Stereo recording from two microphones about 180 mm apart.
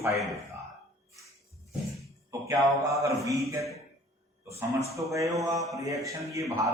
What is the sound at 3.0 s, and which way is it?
A man's voice, 15° right (ahead or behind).